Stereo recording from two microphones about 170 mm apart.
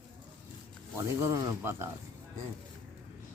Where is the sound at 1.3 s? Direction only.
15° right (ahead or behind).